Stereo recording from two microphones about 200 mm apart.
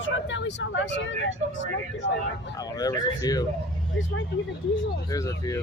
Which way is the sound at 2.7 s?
20° left (ahead or behind).